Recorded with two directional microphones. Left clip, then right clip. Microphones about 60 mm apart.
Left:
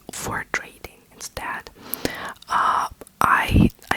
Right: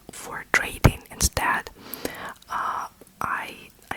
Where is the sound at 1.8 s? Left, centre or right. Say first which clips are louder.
Left 5 dB; centre; by 3.7 s left.